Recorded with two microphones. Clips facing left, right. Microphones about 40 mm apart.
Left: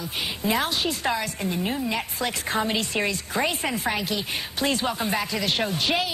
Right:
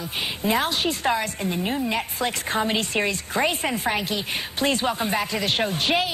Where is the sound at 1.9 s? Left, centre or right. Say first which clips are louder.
Right 2 dB; right.